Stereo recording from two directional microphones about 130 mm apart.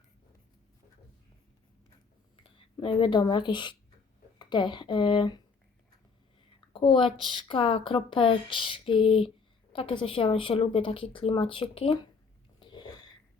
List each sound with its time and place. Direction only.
2.3 s speech: 45° left (ahead or behind)
6.7 s speech: 40° left (ahead or behind)
12.5 s a sound: 35° left (ahead or behind)